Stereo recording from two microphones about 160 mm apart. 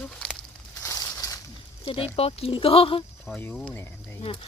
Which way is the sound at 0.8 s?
20° left (ahead or behind).